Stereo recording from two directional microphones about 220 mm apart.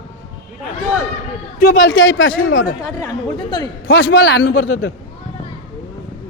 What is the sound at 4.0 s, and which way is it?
Speech, 55° left (ahead or behind).